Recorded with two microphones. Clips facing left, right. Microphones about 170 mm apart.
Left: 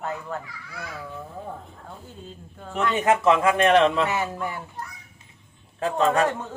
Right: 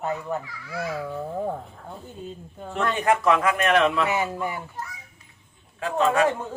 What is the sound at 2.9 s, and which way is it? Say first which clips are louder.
A woman's voice: left 2 dB; 20° left (ahead or behind).